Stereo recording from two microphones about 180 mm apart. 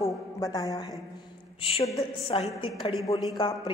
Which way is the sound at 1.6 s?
35° left (ahead or behind).